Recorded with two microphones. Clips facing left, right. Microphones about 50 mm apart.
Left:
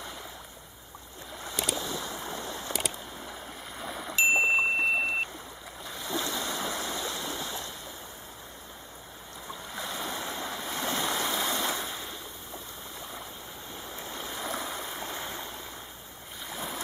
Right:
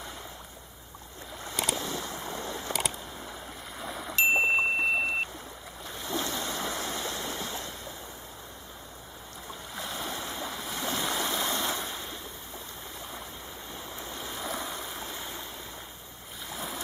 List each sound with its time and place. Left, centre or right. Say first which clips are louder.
1.4 s boat: right 1 dB; centre
1.8 s boat: even; right
2.1 s boat: even; centre
2.4 s a sound: right 1 dB; right
2.7 s a sound: right 1 dB; centre
6.3 s vehicle: even; centre
7.0 s stream: even; right
9.8 s stream: left 1 dB; centre
14.1 s stream: left 1 dB; centre
16.4 s a sound: left 1 dB; centre